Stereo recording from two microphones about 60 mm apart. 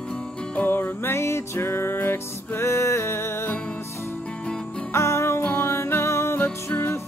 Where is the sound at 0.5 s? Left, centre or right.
Left.